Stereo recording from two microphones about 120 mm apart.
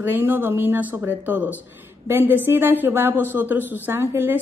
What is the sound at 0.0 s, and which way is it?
A woman's voice, 20° right (ahead or behind).